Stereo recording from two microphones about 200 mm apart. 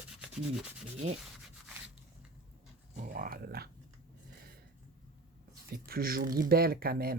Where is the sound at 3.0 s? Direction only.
45° right (ahead or behind).